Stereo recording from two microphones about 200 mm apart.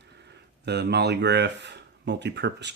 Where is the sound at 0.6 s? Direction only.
55° right (ahead or behind).